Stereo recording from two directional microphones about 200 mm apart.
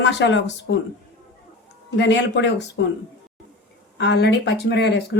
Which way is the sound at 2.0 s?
60° left (ahead or behind).